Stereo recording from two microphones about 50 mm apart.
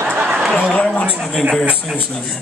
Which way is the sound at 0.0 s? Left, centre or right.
Right.